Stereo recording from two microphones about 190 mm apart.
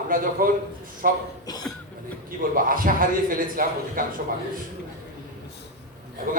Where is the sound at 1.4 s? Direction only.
20° left (ahead or behind).